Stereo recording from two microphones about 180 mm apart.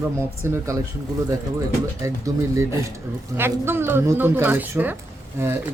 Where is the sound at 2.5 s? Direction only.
15° right (ahead or behind).